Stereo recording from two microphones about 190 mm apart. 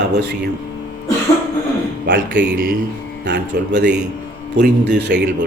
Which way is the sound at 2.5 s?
50° right (ahead or behind).